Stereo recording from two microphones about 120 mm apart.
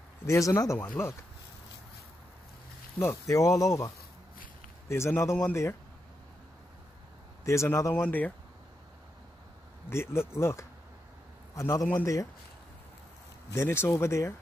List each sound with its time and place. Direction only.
0.3 s speech: 25° left (ahead or behind)
3.0 s speech: 25° left (ahead or behind)
7.4 s speech: 25° left (ahead or behind)
9.8 s a man's voice: 20° left (ahead or behind)
13.5 s speech: 20° left (ahead or behind)